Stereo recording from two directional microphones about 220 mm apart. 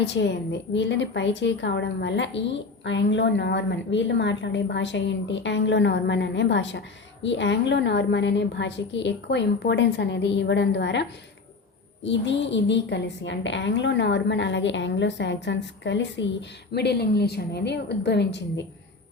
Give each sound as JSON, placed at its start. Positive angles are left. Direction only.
{"t": 0.0, "sound": "a woman's voice", "side_deg": 55}
{"t": 12.0, "sound": "a woman's voice", "side_deg": 55}